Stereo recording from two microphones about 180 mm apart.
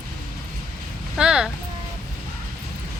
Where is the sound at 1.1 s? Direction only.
5° right (ahead or behind).